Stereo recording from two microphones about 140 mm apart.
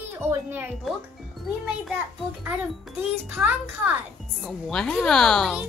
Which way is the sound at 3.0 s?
10° right (ahead or behind).